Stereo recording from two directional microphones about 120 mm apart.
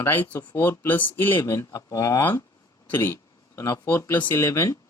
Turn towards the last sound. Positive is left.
turn(degrees=25)  # may be behind; listen again after turning